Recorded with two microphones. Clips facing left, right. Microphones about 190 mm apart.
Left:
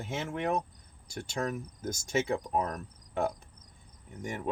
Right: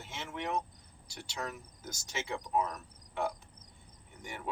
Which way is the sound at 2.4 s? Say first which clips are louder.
Left 1 dB; 50° left (ahead or behind).